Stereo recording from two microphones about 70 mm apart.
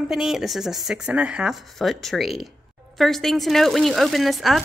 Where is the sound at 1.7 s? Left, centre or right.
Centre.